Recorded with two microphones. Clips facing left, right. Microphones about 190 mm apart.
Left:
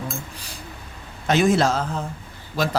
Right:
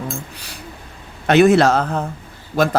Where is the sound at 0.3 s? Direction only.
70° right (ahead or behind).